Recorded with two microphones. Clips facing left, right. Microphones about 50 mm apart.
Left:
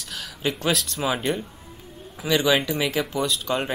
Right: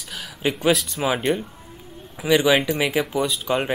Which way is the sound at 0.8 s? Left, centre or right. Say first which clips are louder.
Right 3 dB; centre.